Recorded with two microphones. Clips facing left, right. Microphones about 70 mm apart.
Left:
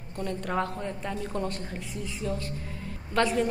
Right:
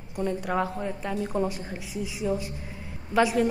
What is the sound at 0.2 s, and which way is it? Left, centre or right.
A woman's voice, centre.